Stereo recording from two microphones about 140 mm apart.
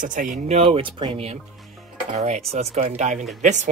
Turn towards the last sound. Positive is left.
turn(degrees=-60)  # may be behind; listen again after turning